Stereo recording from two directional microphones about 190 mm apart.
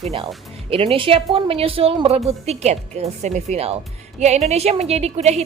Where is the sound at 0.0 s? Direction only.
30° right (ahead or behind).